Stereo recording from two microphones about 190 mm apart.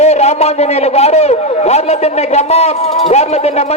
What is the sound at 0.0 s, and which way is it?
Speech, 35° left (ahead or behind).